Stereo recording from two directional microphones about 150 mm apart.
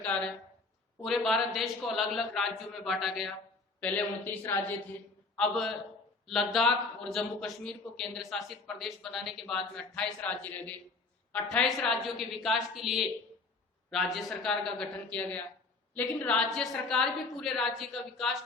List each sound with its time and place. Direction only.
1.0 s a man's voice: centre (ahead or behind)
5.4 s a man's voice: centre (ahead or behind)